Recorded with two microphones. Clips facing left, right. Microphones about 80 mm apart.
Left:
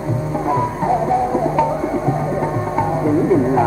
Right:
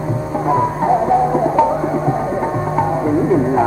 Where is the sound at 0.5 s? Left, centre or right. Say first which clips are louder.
Right 3 dB; right.